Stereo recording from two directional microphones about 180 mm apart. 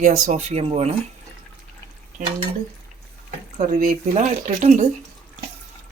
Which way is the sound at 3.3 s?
50° right (ahead or behind).